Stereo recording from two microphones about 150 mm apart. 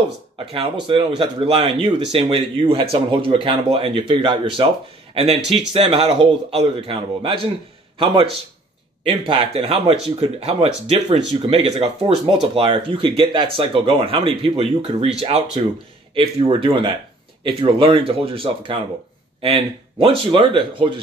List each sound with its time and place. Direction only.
0.5 s speech: 35° right (ahead or behind)